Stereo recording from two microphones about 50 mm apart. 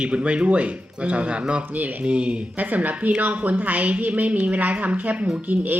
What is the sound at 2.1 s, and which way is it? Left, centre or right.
Speech, right.